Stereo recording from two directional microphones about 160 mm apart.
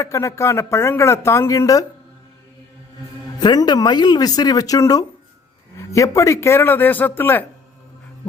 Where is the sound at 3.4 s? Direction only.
25° left (ahead or behind).